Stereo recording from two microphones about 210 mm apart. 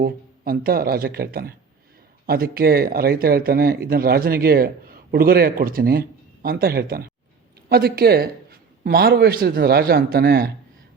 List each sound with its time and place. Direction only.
0.0 s speech: 45° right (ahead or behind)